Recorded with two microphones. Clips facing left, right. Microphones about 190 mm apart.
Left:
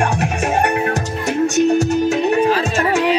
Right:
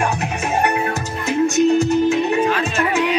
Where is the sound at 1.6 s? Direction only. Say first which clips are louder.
Even; 80° left.